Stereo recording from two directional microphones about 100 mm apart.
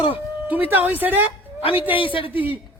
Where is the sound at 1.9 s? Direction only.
60° left (ahead or behind).